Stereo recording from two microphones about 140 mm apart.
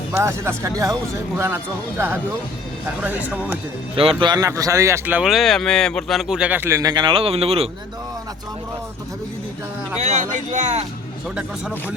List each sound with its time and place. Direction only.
0.2 s speech: 20° right (ahead or behind)
3.9 s speech: 40° right (ahead or behind); by 5.3 s 10° right (ahead or behind)
5.3 s speech: centre (ahead or behind); by 7.7 s 45° right (ahead or behind)
10.0 s speech: 60° right (ahead or behind)